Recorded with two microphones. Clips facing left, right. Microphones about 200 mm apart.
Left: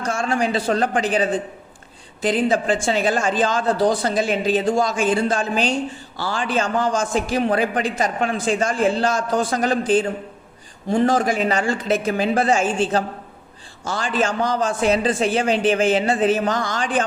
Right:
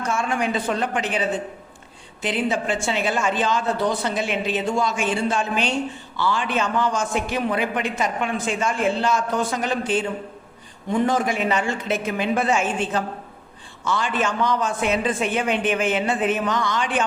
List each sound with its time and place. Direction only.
0.2 s a man's voice: 35° left (ahead or behind)
11.1 s a man's voice: 35° left (ahead or behind)